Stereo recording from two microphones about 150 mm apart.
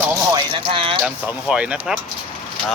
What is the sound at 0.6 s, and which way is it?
Speech, 35° right (ahead or behind).